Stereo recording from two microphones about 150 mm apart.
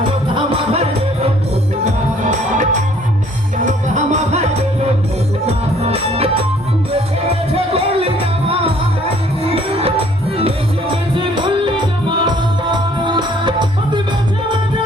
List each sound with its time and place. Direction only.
0.3 s music: 40° right (ahead or behind)
1.8 s music: 55° right (ahead or behind)
5.5 s music: 45° right (ahead or behind)
7.5 s music: 40° right (ahead or behind)
11.1 s music: 35° right (ahead or behind)